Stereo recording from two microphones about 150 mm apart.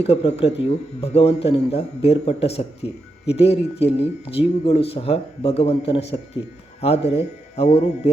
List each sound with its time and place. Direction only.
0.0 s speech: 40° left (ahead or behind)